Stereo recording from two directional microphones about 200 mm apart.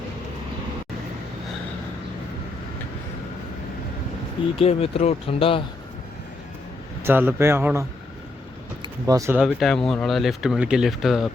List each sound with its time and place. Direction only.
4.5 s speech: 30° left (ahead or behind)
7.0 s speech: 10° right (ahead or behind)
9.4 s speech: centre (ahead or behind)